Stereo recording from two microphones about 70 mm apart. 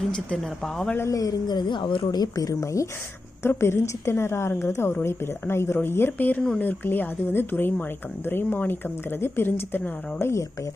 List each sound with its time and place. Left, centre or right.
0.1 s speech: centre
1.1 s a woman's voice: left
3.4 s a woman's voice: left